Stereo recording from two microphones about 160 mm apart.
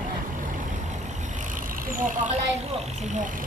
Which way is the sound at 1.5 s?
60° right (ahead or behind).